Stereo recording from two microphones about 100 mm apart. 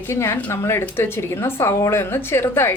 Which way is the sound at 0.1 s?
25° left (ahead or behind).